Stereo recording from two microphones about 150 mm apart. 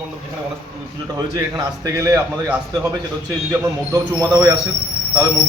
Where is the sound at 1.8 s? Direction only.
20° right (ahead or behind).